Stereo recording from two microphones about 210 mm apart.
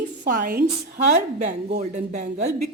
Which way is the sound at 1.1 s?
30° right (ahead or behind).